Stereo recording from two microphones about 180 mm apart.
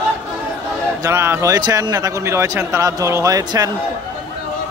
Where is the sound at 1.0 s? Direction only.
15° right (ahead or behind).